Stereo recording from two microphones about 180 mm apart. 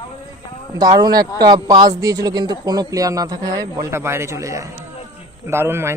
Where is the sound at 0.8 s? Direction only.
20° right (ahead or behind).